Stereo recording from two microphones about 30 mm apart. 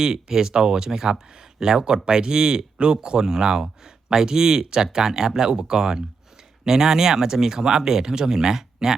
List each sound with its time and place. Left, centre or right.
0.0 s speech: right